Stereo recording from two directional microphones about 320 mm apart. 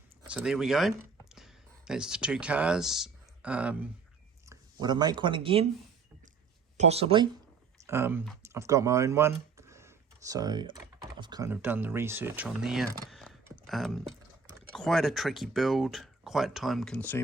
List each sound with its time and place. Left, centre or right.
0.2 s speech: centre
6.7 s speech: centre